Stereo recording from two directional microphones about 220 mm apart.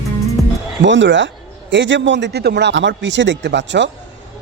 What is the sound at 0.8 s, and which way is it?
A man's voice, 55° right (ahead or behind).